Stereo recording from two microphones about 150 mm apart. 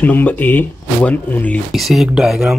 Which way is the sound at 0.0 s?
10° left (ahead or behind).